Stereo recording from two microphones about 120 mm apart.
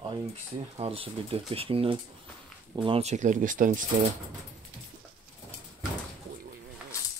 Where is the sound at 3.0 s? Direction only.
90° right.